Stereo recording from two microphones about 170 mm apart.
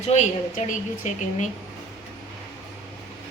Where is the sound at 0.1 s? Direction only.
45° left (ahead or behind).